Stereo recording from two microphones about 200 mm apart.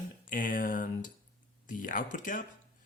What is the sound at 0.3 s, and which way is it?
Speech, 45° left (ahead or behind).